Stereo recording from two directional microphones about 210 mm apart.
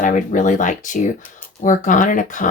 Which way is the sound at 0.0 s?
35° left (ahead or behind).